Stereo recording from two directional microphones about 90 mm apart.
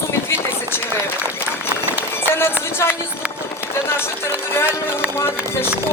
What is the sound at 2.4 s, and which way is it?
Speech, 30° left (ahead or behind).